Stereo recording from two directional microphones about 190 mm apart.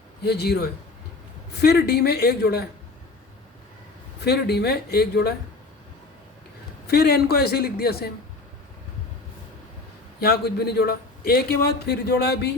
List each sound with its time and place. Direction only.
0.2 s a man's voice: 60° left (ahead or behind)
4.2 s a man's voice: 60° left (ahead or behind)
6.8 s a man's voice: 60° left (ahead or behind)
10.2 s a man's voice: 55° left (ahead or behind)